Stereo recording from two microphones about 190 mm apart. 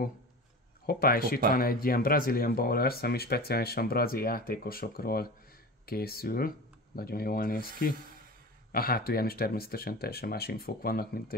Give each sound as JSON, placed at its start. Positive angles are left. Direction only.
{"t": 0.8, "sound": "speech", "side_deg": 50}
{"t": 8.7, "sound": "speech", "side_deg": 50}